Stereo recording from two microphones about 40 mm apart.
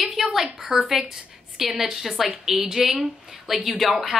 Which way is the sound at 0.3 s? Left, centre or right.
Centre.